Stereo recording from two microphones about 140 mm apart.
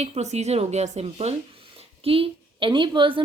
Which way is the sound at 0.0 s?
55° right (ahead or behind).